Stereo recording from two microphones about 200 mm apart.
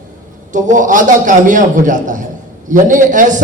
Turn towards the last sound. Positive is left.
turn(degrees=-40)  # may be behind; listen again after turning